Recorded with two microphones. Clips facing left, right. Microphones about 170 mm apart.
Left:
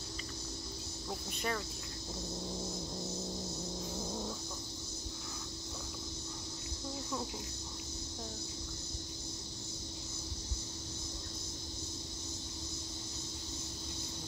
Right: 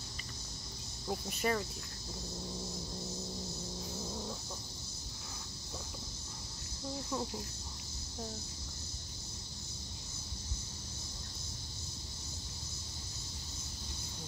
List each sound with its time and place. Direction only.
1.4 s speech: 5° right (ahead or behind)